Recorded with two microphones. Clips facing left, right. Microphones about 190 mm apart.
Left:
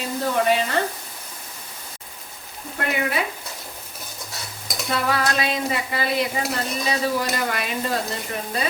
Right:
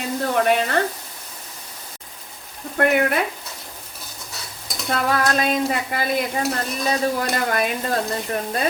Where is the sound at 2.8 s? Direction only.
55° right (ahead or behind).